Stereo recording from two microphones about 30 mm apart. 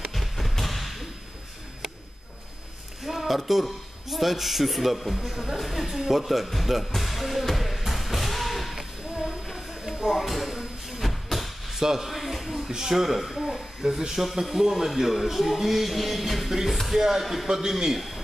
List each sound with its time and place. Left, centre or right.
0.1 s thump: centre
3.1 s a sound: centre
4.1 s speech: centre
5.2 s a man's voice: centre
5.6 s music: centre
9.8 s a sound: centre
10.1 s speech: centre
10.9 s vehicle: centre
11.7 s speech: centre
12.1 s a sound: centre
12.7 s speech: centre
13.8 s a man's voice: centre
17.5 s a man's voice: centre
17.9 s a man's voice: centre